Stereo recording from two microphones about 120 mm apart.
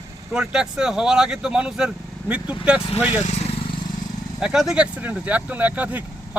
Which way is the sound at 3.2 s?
65° left (ahead or behind).